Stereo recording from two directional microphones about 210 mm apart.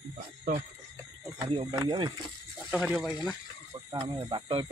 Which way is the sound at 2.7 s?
5° right (ahead or behind).